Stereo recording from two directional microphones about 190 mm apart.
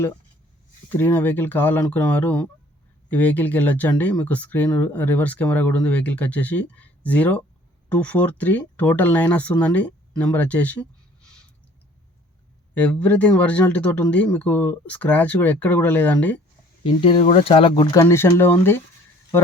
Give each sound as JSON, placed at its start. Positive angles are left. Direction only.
{"t": 0.9, "sound": "speech", "side_deg": 10}
{"t": 12.7, "sound": "speech", "side_deg": 10}
{"t": 16.8, "sound": "speech", "side_deg": 30}